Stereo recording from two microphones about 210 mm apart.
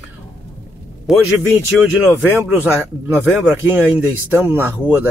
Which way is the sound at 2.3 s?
10° right (ahead or behind).